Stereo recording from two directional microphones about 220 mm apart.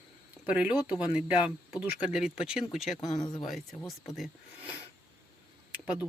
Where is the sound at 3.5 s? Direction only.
Centre (ahead or behind).